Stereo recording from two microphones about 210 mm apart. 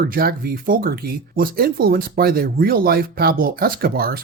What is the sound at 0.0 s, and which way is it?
Speech, 45° right (ahead or behind).